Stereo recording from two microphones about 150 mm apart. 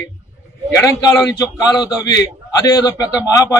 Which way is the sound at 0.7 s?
25° left (ahead or behind).